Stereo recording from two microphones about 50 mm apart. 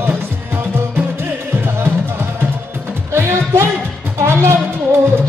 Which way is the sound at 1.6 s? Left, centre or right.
Right.